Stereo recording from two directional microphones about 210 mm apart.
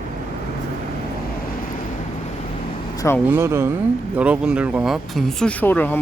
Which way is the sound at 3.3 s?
10° right (ahead or behind).